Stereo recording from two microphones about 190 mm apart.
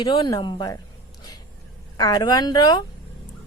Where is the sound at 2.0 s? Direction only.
20° left (ahead or behind).